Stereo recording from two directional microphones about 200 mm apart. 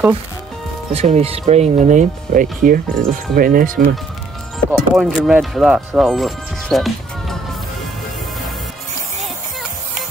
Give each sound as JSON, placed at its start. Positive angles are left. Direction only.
{"t": 0.9, "sound": "speech", "side_deg": -30}
{"t": 4.6, "sound": "speech", "side_deg": 0}